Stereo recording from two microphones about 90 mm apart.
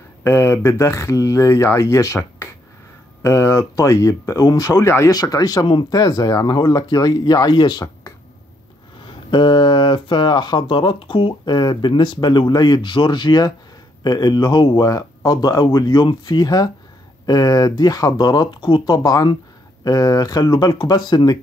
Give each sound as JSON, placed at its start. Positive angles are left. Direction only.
{"t": 0.2, "sound": "speech", "side_deg": 30}
{"t": 5.1, "sound": "speech", "side_deg": 45}
{"t": 9.0, "sound": "speech", "side_deg": 60}
{"t": 18.6, "sound": "speech", "side_deg": 60}
{"t": 19.0, "sound": "speech", "side_deg": 45}